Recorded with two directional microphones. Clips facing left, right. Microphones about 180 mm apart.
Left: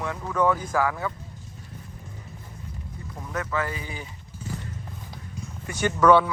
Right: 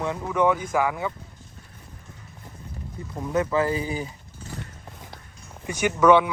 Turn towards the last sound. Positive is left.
turn(degrees=-10)  # may be behind; listen again after turning